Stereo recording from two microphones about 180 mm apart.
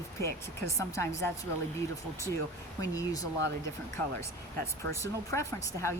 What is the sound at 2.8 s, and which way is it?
Speech, 20° left (ahead or behind).